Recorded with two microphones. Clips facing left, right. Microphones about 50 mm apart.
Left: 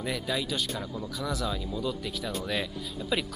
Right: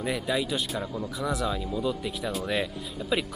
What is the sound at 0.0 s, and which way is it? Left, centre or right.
Speech, centre.